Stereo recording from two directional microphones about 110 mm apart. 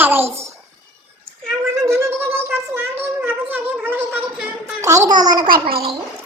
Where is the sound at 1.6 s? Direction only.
25° right (ahead or behind).